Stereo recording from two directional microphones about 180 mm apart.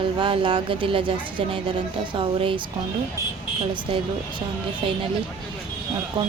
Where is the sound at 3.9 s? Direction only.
30° right (ahead or behind).